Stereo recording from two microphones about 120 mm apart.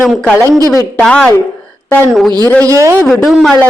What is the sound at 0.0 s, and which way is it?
A woman's voice, centre (ahead or behind).